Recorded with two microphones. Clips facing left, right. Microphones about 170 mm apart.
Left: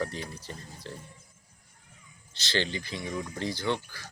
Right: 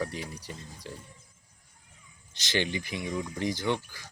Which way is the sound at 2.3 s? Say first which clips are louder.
Right 1 dB; 15° right (ahead or behind).